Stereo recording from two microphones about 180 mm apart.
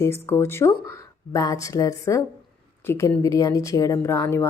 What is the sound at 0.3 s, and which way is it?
Speech, 15° left (ahead or behind).